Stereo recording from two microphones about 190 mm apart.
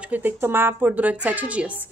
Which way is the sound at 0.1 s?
10° right (ahead or behind).